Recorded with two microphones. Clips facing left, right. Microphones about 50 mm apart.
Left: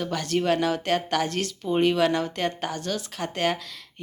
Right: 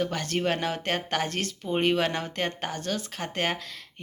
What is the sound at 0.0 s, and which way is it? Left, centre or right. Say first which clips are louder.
Speech: left 2 dB; right.